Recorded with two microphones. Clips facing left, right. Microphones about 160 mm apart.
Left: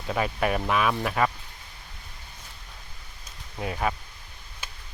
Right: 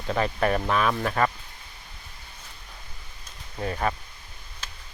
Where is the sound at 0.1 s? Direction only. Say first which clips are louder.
Right 2 dB; 10° left (ahead or behind).